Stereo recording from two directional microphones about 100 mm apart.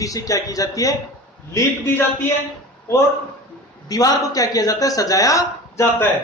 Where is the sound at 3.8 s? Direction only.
40° left (ahead or behind).